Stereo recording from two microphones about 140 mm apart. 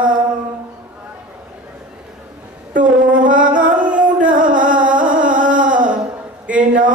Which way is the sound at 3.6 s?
10° right (ahead or behind).